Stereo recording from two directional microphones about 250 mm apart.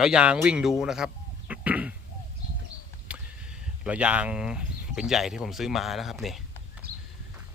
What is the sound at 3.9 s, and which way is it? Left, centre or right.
Speech, centre.